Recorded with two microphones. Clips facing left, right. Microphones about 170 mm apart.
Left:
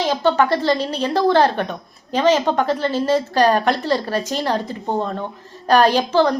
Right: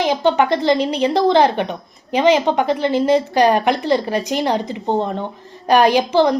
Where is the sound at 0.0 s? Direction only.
15° right (ahead or behind).